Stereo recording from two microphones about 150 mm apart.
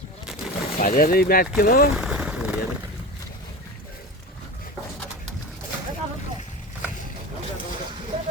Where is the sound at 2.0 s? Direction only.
5° right (ahead or behind).